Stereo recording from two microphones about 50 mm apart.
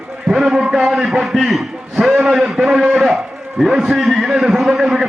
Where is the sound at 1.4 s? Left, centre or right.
Centre.